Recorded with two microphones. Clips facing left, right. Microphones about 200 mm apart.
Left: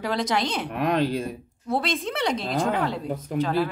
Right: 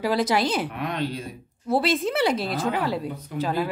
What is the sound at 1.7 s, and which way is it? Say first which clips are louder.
A woman's voice: right 4 dB; 5° right (ahead or behind).